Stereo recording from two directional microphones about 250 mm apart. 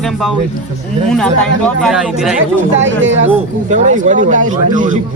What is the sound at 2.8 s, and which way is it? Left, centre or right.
Speech, right.